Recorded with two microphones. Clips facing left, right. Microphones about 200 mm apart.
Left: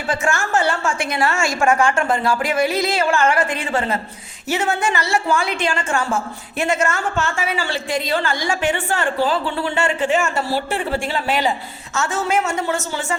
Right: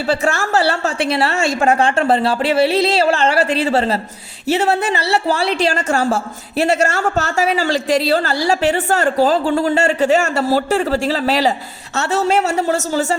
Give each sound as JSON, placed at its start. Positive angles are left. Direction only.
{"t": 0.1, "sound": "a woman's voice", "side_deg": -35}
{"t": 6.7, "sound": "a man's voice", "side_deg": -70}
{"t": 7.2, "sound": "a woman's voice", "side_deg": -40}
{"t": 10.2, "sound": "a man's voice", "side_deg": -75}
{"t": 10.9, "sound": "a woman's voice", "side_deg": -40}